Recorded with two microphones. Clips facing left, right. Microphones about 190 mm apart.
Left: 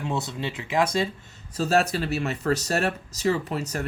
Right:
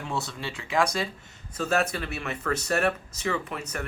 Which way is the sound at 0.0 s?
20° left (ahead or behind).